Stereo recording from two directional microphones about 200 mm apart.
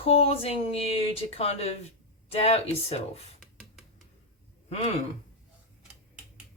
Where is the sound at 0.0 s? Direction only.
30° left (ahead or behind).